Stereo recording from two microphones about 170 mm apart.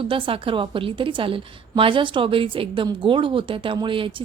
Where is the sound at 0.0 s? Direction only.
30° right (ahead or behind).